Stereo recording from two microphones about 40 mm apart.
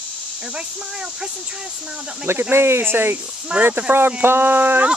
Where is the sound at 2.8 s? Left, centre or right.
Right.